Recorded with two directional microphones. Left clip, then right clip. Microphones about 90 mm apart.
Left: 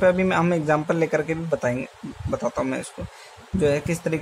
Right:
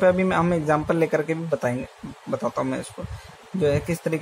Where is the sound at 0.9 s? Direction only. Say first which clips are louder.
Even; 15° right (ahead or behind).